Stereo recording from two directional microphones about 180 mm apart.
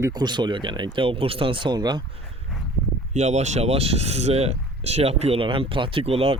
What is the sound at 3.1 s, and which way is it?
Speech, 40° right (ahead or behind).